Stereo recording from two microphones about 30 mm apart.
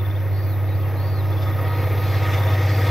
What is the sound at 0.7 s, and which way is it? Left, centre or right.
Vehicle, centre.